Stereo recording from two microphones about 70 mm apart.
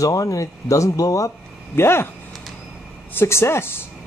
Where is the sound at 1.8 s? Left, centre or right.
Left.